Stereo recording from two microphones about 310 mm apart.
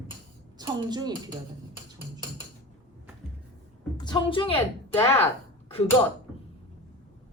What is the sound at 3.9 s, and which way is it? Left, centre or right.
Speech, centre.